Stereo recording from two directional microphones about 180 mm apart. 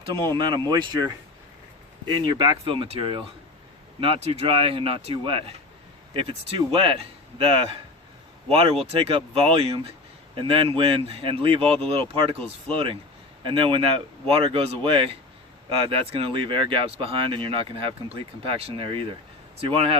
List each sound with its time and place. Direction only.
0.0 s speech: 25° right (ahead or behind)
2.3 s speech: 25° right (ahead or behind)